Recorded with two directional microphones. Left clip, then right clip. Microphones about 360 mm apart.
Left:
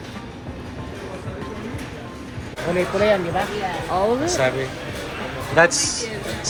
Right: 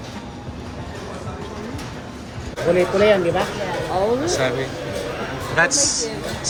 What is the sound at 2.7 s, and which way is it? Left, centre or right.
Speech, centre.